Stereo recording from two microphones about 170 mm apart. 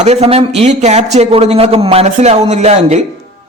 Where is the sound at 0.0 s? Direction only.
40° right (ahead or behind).